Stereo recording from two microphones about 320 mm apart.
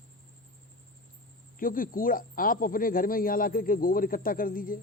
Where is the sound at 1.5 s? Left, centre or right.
Left.